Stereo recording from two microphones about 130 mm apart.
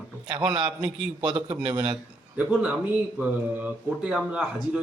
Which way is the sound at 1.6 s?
35° right (ahead or behind).